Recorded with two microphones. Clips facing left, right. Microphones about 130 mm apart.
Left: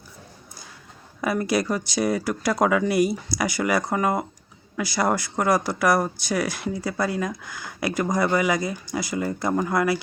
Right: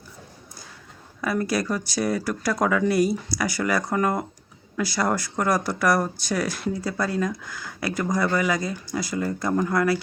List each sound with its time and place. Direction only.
1.2 s speech: 15° left (ahead or behind)